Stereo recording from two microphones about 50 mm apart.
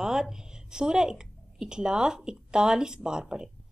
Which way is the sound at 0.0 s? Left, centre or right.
Centre.